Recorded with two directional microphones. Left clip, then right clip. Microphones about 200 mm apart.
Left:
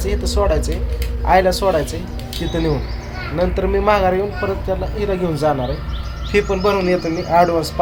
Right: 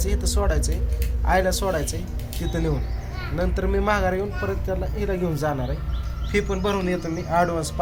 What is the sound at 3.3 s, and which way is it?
Speech, centre (ahead or behind).